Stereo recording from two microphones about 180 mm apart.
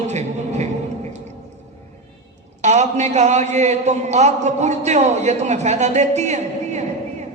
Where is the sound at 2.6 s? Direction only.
40° right (ahead or behind).